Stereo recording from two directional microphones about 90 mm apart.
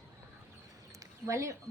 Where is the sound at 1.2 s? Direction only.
35° right (ahead or behind).